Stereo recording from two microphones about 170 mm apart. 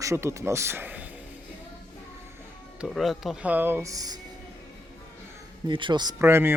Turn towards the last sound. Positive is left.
turn(degrees=-15)  # may be behind; listen again after turning